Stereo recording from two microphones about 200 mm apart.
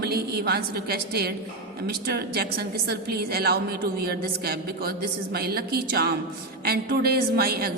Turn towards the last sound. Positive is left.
turn(degrees=-50)  # may be behind; listen again after turning